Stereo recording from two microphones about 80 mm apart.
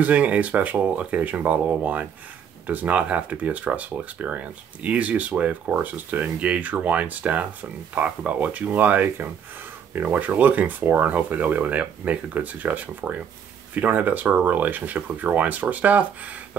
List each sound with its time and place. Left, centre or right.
0.0 s speech: centre